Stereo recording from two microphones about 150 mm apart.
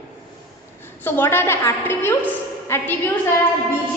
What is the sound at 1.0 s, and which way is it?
A woman's voice, 15° left (ahead or behind).